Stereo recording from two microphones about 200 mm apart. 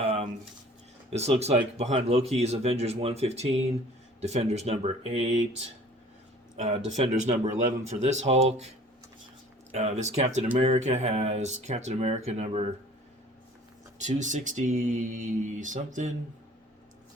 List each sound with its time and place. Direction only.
0.0 s a sound: 30° right (ahead or behind)
1.1 s speech: 30° right (ahead or behind)
9.7 s speech: 35° right (ahead or behind)
14.0 s speech: 35° right (ahead or behind)